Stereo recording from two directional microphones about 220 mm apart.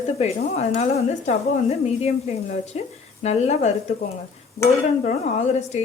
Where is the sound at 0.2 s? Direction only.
30° left (ahead or behind).